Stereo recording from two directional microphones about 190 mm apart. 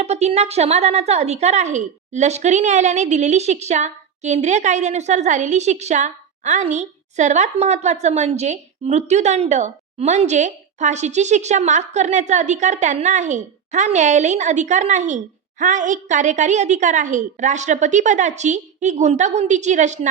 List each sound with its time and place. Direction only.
0.0 s a woman's voice: 35° right (ahead or behind)